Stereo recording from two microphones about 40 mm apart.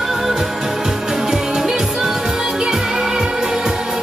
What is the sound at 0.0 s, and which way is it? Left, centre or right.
Music, centre.